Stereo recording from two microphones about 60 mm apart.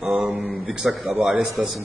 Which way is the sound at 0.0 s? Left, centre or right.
Centre.